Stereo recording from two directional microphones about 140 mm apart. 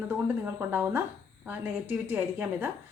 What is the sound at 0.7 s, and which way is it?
A woman's voice, 15° right (ahead or behind).